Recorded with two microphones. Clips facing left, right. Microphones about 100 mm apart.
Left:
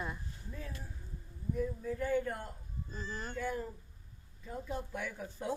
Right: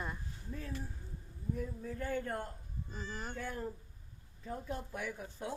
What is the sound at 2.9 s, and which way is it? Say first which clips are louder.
Speech: left 1 dB; 10° right (ahead or behind).